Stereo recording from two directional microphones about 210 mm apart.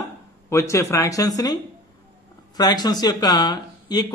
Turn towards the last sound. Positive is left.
turn(degrees=20)  # may be behind; listen again after turning